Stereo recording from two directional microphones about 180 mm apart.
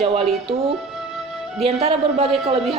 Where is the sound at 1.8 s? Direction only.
35° right (ahead or behind).